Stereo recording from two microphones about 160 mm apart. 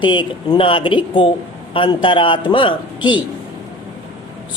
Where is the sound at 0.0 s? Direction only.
30° left (ahead or behind).